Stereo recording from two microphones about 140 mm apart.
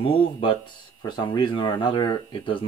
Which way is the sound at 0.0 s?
40° left (ahead or behind).